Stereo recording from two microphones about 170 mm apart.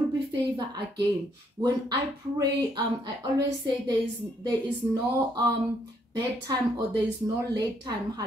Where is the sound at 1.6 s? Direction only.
20° right (ahead or behind).